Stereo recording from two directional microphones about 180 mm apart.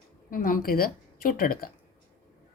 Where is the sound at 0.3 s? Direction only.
50° left (ahead or behind).